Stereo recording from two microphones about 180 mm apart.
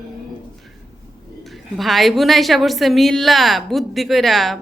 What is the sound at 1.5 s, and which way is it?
A woman's voice, centre (ahead or behind).